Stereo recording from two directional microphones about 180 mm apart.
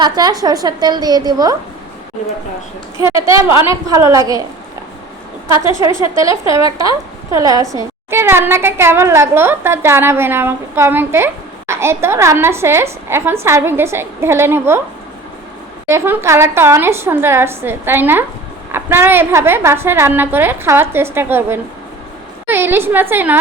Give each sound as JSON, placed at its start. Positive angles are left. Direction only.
{"t": 0.0, "sound": "a woman's voice", "side_deg": -20}
{"t": 3.0, "sound": "a woman's voice", "side_deg": -15}
{"t": 5.6, "sound": "a woman's voice", "side_deg": -15}
{"t": 15.9, "sound": "a woman's voice", "side_deg": -15}